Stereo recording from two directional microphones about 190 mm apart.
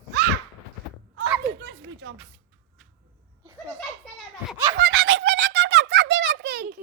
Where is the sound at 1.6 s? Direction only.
85° right.